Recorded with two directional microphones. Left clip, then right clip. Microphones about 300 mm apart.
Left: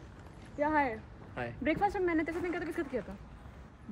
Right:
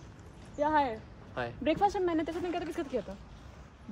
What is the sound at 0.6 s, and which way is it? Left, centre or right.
Speech, centre.